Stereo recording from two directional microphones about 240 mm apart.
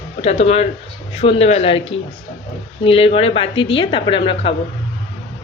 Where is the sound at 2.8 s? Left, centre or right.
Left.